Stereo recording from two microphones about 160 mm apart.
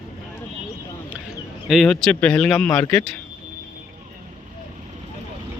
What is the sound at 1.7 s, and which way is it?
Speech, centre (ahead or behind).